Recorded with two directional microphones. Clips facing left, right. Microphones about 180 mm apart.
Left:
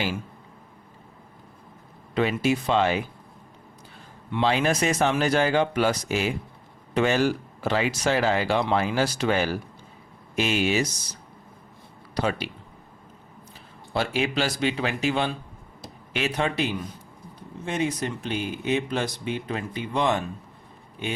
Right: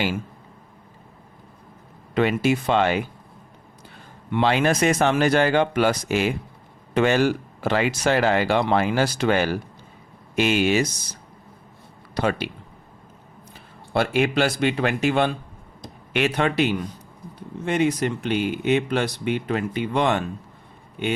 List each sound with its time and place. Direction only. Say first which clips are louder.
2.1 s speech: right 3 dB; 60° right (ahead or behind)
4.3 s speech: right 3 dB; 60° right (ahead or behind)
13.5 s speech: right 4 dB; 55° right (ahead or behind)
17.7 s speech: right 5 dB; 65° right (ahead or behind)